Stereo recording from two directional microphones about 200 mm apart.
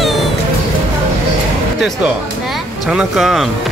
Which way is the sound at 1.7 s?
Centre (ahead or behind).